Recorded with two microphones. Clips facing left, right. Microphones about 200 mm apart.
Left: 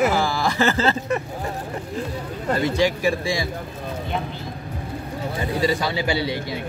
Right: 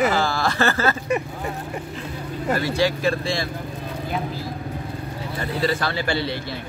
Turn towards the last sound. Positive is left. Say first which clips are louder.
# left 1 dB
turn(degrees=10)  # may be behind; listen again after turning